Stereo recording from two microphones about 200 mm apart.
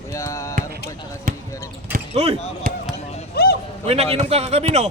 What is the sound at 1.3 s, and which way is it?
Speech, 45° right (ahead or behind).